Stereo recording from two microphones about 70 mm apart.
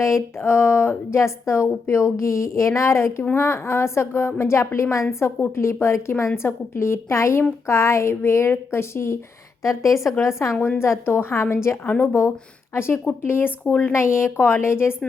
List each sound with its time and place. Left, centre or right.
0.0 s speech: left
5.0 s a woman's voice: left
5.5 s a woman's voice: left
11.9 s a woman's voice: left
12.7 s speech: left